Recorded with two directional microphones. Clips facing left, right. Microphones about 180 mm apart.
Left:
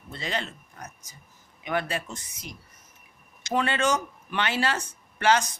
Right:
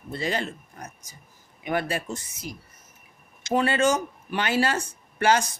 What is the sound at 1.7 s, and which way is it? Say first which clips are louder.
Speech: right 2 dB; 40° right (ahead or behind).